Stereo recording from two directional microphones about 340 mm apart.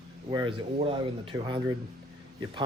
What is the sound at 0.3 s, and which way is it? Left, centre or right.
Speech, centre.